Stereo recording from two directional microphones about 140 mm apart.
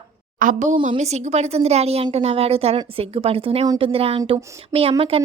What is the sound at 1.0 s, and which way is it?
A woman's voice, 55° right (ahead or behind).